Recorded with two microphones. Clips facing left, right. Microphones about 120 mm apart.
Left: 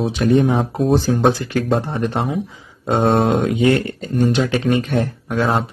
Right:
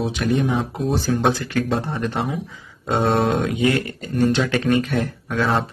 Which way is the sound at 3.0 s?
40° left (ahead or behind).